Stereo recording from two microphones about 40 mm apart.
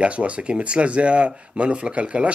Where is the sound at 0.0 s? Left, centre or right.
Right.